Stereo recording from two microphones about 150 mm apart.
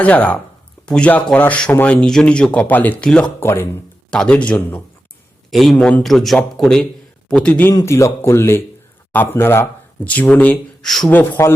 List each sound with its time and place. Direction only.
0.0 s speech: 10° left (ahead or behind)
7.7 s speech: 20° left (ahead or behind); by 11.1 s centre (ahead or behind)
11.1 s speech: 15° left (ahead or behind)